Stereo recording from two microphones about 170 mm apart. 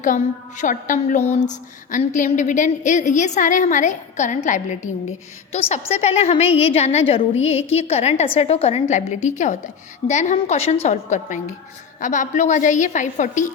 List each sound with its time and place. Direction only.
0.6 s a woman's voice: 50° left (ahead or behind)